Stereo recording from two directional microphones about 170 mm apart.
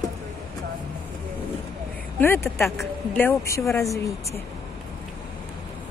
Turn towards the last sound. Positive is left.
turn(degrees=20)  # may be behind; listen again after turning